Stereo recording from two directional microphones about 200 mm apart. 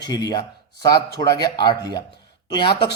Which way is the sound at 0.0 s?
20° left (ahead or behind).